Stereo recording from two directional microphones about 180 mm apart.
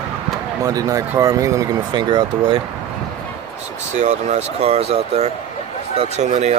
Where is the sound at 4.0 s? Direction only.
40° right (ahead or behind).